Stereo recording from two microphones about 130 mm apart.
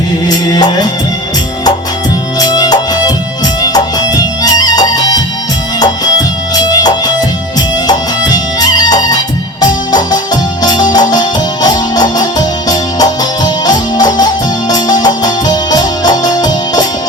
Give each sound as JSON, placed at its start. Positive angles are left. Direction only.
{"t": 0.3, "sound": "music", "side_deg": 30}
{"t": 2.4, "sound": "music", "side_deg": 30}